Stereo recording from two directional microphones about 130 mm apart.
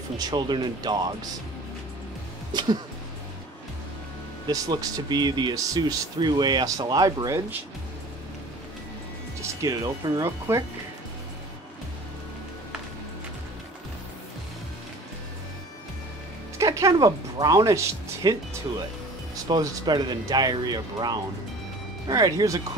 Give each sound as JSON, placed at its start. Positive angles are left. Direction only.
{"t": 0.2, "sound": "speech", "side_deg": -35}
{"t": 4.5, "sound": "speech", "side_deg": -30}
{"t": 9.4, "sound": "speech", "side_deg": -25}
{"t": 16.5, "sound": "speech", "side_deg": -25}
{"t": 19.4, "sound": "speech", "side_deg": -30}